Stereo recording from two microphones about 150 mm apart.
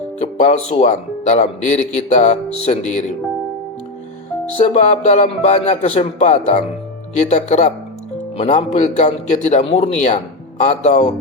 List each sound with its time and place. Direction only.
0.2 s speech: 50° left (ahead or behind)
4.5 s speech: 45° left (ahead or behind)